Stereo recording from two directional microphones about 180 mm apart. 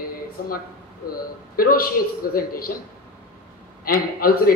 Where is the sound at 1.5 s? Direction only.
55° left (ahead or behind).